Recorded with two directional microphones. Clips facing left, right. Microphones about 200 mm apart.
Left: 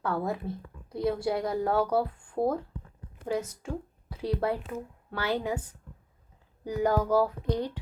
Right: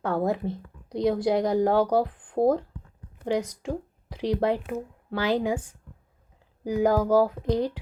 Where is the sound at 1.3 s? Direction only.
90° right.